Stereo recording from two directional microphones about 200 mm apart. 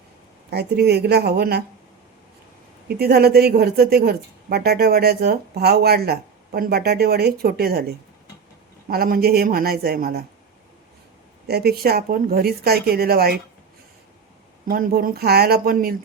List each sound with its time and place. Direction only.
0.5 s a woman's voice: 55° right (ahead or behind)
3.0 s a woman's voice: 50° right (ahead or behind)
8.9 s a woman's voice: 50° right (ahead or behind)
11.4 s a woman's voice: 55° right (ahead or behind)
14.7 s a woman's voice: 45° right (ahead or behind)